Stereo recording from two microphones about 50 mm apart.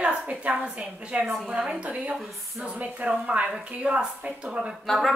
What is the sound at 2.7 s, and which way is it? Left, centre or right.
A woman's voice, right.